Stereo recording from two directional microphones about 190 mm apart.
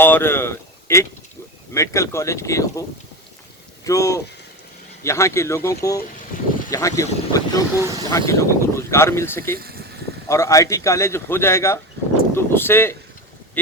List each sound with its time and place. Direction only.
0.0 s speech: 10° left (ahead or behind)
3.8 s speech: 15° left (ahead or behind)
7.8 s speech: 15° right (ahead or behind)
8.1 s speech: 15° left (ahead or behind)
9.6 s speech: 55° right (ahead or behind)
10.2 s speech: 15° left (ahead or behind)